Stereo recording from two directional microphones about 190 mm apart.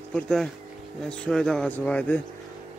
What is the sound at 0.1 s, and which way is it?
Speech, 5° left (ahead or behind).